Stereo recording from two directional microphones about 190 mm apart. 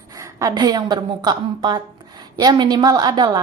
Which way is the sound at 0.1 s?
15° right (ahead or behind).